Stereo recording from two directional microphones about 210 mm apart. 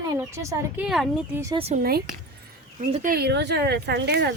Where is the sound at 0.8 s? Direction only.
Centre (ahead or behind).